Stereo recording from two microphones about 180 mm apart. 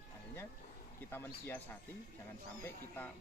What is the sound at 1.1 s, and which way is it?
Speech, 10° left (ahead or behind).